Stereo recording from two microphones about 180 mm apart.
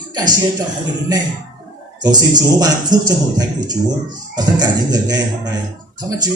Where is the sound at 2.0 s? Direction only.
20° right (ahead or behind).